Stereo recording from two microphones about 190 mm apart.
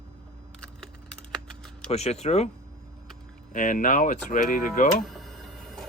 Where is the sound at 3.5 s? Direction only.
45° left (ahead or behind).